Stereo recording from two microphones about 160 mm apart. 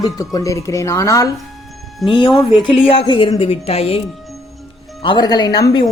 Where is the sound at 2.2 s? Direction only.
30° left (ahead or behind).